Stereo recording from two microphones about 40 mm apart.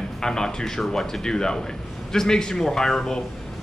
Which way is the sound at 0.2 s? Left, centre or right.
Centre.